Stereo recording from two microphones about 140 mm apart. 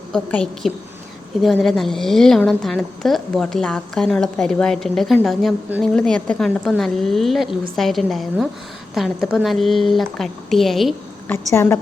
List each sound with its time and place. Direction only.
0.1 s a woman's voice: 5° left (ahead or behind)
11.3 s a woman's voice: 15° left (ahead or behind)